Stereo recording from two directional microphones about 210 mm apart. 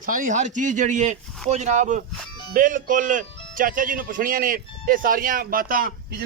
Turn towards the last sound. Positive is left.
turn(degrees=-45)  # may be behind; listen again after turning